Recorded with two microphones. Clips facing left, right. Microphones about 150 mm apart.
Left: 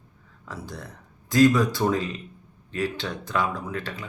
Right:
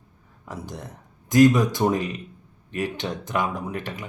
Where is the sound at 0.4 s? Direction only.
20° right (ahead or behind).